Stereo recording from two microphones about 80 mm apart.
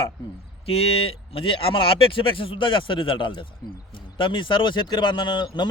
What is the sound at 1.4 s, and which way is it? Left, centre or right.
Speech, left.